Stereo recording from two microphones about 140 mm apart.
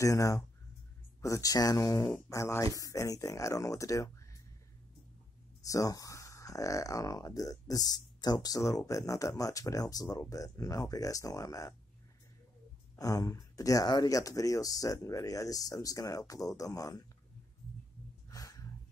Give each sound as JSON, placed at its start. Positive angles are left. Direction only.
{"t": 0.0, "sound": "speech", "side_deg": 25}
{"t": 5.7, "sound": "speech", "side_deg": 25}
{"t": 12.9, "sound": "speech", "side_deg": 25}
{"t": 18.3, "sound": "a sound", "side_deg": 25}